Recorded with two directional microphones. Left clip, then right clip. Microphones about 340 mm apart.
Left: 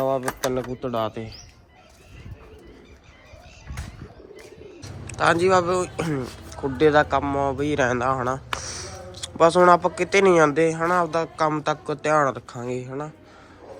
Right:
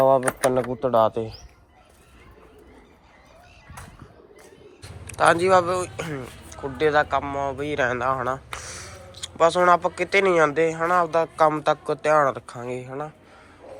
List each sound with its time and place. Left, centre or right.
0.0 s speech: centre
4.8 s speech: centre